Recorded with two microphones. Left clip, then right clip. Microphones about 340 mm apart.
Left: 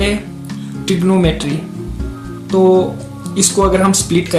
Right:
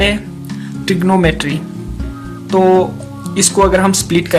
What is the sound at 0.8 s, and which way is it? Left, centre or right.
Speech, right.